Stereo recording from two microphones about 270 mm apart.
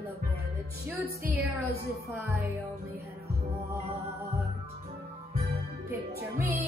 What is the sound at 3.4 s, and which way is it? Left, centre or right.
Music, right.